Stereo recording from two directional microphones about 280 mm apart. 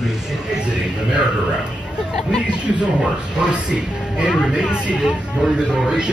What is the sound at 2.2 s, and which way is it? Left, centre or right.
Speech, centre.